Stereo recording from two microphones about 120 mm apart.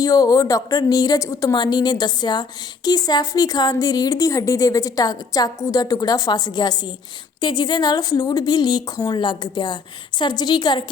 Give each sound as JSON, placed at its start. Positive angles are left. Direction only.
{"t": 0.0, "sound": "a woman's voice", "side_deg": 30}